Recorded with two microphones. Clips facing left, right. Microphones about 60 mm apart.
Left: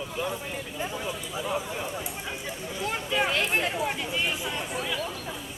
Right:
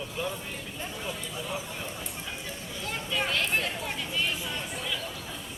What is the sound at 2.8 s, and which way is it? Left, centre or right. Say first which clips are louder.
Speech: left 4 dB; centre.